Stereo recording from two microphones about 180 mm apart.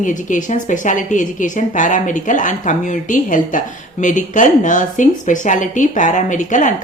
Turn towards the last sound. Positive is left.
turn(degrees=45)  # may be behind; listen again after turning